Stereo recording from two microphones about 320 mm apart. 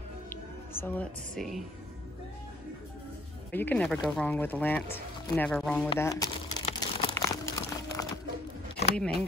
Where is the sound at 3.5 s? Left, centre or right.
Centre.